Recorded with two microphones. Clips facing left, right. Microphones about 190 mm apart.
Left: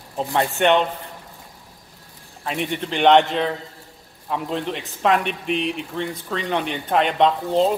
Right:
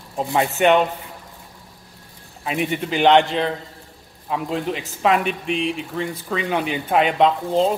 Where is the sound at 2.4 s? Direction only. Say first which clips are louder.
Right 2 dB; 5° right (ahead or behind).